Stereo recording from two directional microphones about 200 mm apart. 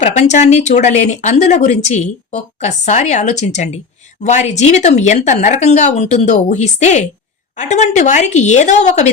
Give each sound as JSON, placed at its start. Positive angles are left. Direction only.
{"t": 0.0, "sound": "speech", "side_deg": 35}